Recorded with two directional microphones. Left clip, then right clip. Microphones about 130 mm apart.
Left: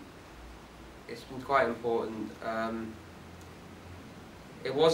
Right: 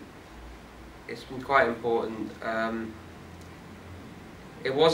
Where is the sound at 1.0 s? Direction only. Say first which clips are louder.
Right 4 dB; centre (ahead or behind).